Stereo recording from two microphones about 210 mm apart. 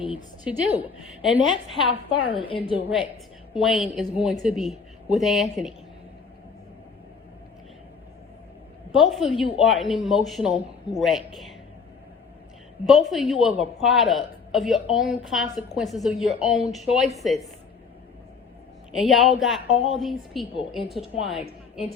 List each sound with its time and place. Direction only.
0.4 s speech: 5° right (ahead or behind)
2.2 s a woman's voice: 25° left (ahead or behind)
2.7 s a woman's voice: 10° right (ahead or behind)
9.0 s speech: centre (ahead or behind)
12.8 s speech: centre (ahead or behind)
18.9 s speech: centre (ahead or behind)